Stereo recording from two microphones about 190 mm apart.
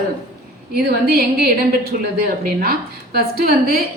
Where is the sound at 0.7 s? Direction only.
55° right (ahead or behind).